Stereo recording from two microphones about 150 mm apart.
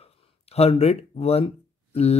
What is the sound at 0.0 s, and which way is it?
Speech, 45° left (ahead or behind).